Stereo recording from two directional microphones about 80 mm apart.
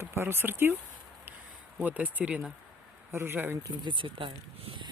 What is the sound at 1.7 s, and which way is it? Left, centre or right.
Speech, centre.